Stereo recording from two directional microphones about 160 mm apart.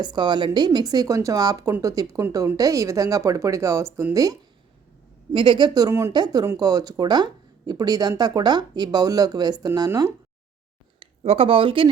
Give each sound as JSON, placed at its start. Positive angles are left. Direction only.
{"t": 0.0, "sound": "speech", "side_deg": -25}
{"t": 11.0, "sound": "speech", "side_deg": -35}